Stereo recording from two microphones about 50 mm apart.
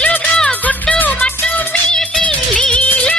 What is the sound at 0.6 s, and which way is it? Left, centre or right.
Music, left.